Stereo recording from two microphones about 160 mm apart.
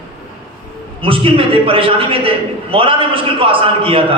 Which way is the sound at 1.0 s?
35° right (ahead or behind).